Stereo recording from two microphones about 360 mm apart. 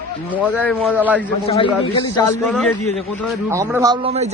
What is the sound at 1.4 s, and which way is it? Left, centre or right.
A man's voice, centre.